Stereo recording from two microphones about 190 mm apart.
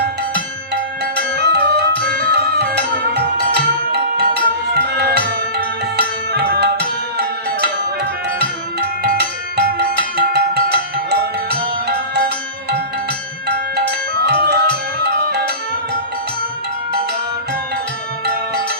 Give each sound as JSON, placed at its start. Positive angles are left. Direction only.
{"t": 1.1, "sound": "music", "side_deg": 5}
{"t": 1.5, "sound": "music", "side_deg": -60}
{"t": 9.0, "sound": "music", "side_deg": -55}
{"t": 14.3, "sound": "music", "side_deg": -55}